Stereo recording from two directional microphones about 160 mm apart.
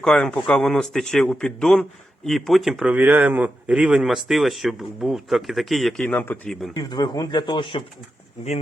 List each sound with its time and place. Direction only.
0.0 s a man's voice: 5° left (ahead or behind)
6.7 s speech: 25° left (ahead or behind)